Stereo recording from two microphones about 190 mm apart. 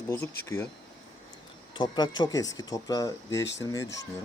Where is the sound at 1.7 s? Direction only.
25° left (ahead or behind).